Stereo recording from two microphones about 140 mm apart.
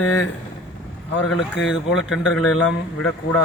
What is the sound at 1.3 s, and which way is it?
A man's voice, centre (ahead or behind).